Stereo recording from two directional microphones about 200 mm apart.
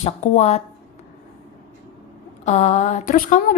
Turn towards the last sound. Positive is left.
turn(degrees=40)  # may be behind; listen again after turning